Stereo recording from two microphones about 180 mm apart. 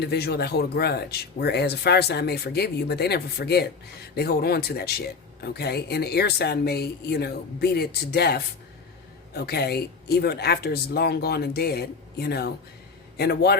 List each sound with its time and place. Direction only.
0.0 s speech: 65° left (ahead or behind)